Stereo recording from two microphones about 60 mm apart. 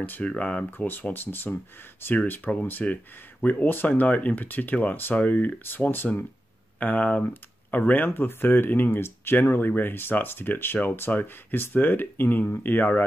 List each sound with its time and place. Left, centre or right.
0.4 s speech: centre
0.7 s speech: left